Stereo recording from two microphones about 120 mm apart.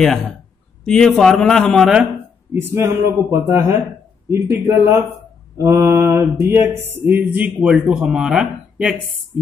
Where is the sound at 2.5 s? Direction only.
20° right (ahead or behind).